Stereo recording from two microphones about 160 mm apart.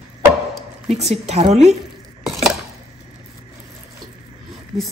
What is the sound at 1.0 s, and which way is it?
Speech, 40° right (ahead or behind).